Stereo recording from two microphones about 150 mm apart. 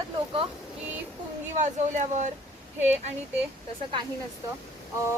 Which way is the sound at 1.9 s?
55° right (ahead or behind).